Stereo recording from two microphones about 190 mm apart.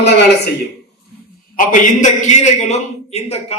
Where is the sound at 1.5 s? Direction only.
40° left (ahead or behind).